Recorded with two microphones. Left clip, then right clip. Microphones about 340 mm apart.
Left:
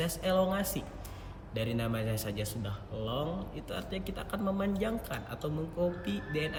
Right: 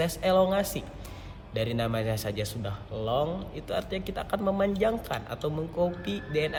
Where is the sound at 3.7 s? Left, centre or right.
Centre.